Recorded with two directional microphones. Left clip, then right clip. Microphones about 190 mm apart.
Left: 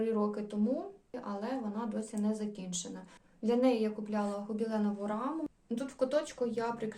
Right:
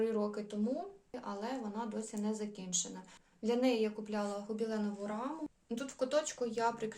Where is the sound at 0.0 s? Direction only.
10° right (ahead or behind).